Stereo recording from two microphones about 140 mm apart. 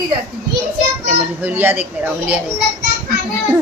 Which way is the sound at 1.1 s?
10° right (ahead or behind).